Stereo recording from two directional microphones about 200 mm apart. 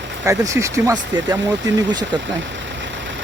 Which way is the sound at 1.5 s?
65° right (ahead or behind).